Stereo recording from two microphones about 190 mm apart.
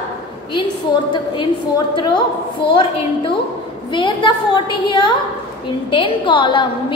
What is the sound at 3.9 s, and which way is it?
A woman's voice, 25° left (ahead or behind).